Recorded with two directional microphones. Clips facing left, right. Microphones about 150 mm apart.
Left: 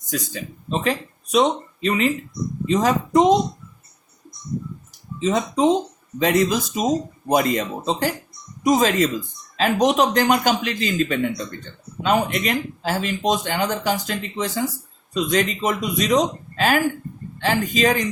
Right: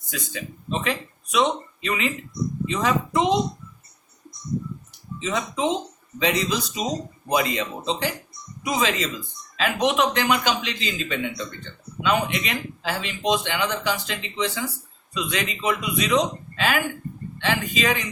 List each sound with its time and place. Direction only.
0.0 s speech: 40° left (ahead or behind)
5.2 s speech: 40° left (ahead or behind)